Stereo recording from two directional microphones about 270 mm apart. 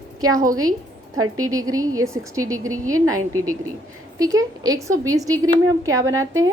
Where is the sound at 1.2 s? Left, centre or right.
Right.